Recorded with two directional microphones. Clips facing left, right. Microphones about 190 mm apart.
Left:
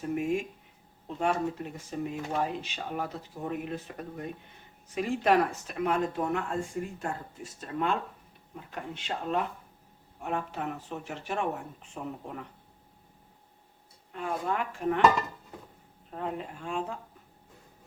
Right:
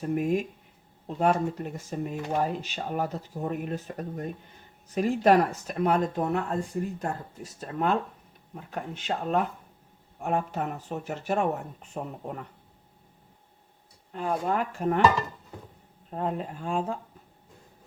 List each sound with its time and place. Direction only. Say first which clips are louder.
0.0 s speech: right 3 dB; 40° right (ahead or behind)
14.1 s speech: right 4 dB; 35° right (ahead or behind)
16.0 s speech: right 4 dB; 35° right (ahead or behind)